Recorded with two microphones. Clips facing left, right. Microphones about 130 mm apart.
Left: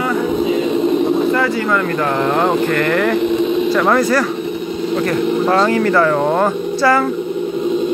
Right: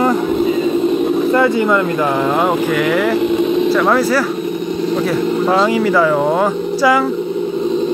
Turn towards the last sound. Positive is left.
turn(degrees=-10)  # may be behind; listen again after turning